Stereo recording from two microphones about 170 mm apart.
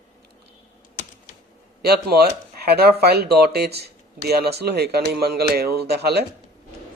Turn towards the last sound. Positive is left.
turn(degrees=-70)  # may be behind; listen again after turning